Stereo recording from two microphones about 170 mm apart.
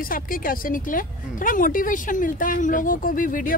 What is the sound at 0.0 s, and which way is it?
Speech, 55° left (ahead or behind).